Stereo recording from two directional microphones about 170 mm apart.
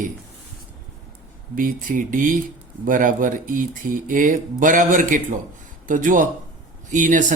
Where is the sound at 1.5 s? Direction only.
55° right (ahead or behind).